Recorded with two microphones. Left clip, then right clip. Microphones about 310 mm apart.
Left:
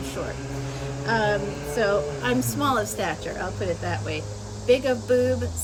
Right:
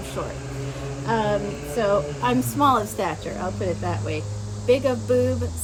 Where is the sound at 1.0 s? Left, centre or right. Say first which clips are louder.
Even; centre.